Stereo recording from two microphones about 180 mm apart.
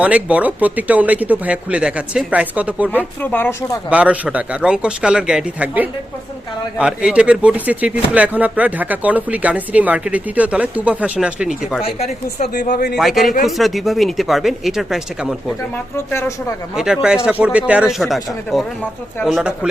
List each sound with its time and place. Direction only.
0.0 s speech: 5° right (ahead or behind)
2.9 s speech: 10° left (ahead or behind)
3.8 s speech: 5° right (ahead or behind)
11.8 s speech: 35° left (ahead or behind)
12.6 s speech: 55° left (ahead or behind)
13.0 s speech: centre (ahead or behind)
16.0 s speech: 15° left (ahead or behind)
16.7 s speech: 5° right (ahead or behind)